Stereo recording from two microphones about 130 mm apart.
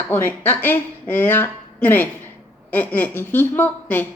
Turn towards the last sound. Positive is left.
turn(degrees=15)  # may be behind; listen again after turning